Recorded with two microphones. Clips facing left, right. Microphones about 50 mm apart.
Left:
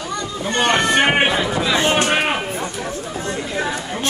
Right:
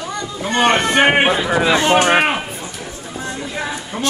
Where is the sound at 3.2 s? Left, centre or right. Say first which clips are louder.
Left 1 dB; left.